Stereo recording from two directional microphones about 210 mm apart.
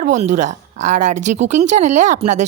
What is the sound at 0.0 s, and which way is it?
A woman's voice, 35° right (ahead or behind).